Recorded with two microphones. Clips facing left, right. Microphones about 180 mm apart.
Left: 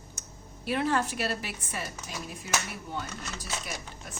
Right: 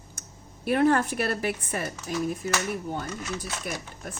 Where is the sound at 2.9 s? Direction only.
50° right (ahead or behind).